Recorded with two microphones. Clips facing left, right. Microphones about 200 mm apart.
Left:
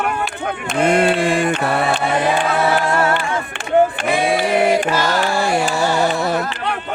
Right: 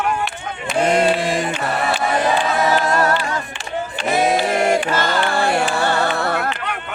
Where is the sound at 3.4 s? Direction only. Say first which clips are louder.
Left 11 dB; 60° left (ahead or behind).